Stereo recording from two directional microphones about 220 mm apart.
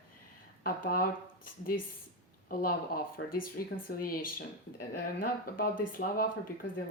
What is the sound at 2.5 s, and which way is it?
Speech, 40° left (ahead or behind).